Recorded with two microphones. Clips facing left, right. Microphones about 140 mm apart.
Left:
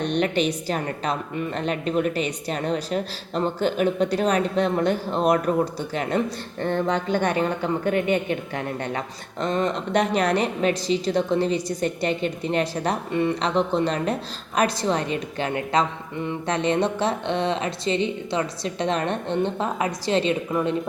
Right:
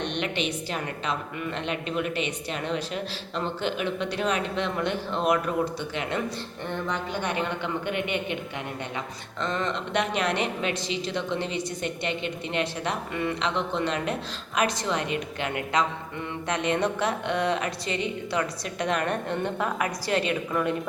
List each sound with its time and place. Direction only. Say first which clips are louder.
0.0 s a woman's voice: left 7 dB; 40° left (ahead or behind); by 20.7 s 25° left (ahead or behind)